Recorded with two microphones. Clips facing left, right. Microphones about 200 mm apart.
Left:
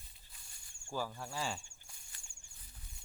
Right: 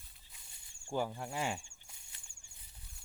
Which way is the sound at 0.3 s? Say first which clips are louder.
Even; 20° right (ahead or behind).